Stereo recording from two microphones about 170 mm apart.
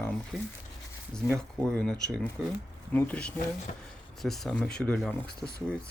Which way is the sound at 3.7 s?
45° left (ahead or behind).